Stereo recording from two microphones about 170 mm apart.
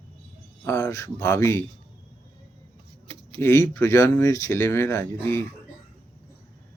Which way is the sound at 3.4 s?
15° left (ahead or behind).